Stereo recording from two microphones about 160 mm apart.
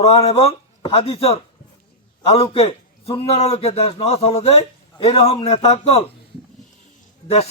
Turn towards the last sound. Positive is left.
turn(degrees=40)  # may be behind; listen again after turning